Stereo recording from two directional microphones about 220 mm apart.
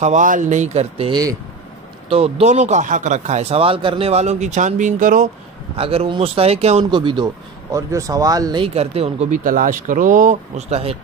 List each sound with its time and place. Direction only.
0.0 s speech: 35° right (ahead or behind)
5.8 s speech: 25° right (ahead or behind)